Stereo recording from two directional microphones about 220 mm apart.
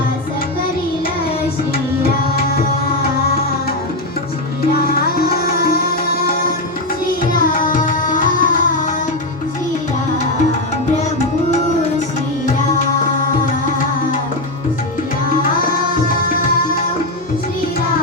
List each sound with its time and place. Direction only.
4.9 s sitar: 45° left (ahead or behind)
7.5 s tabla: 40° left (ahead or behind)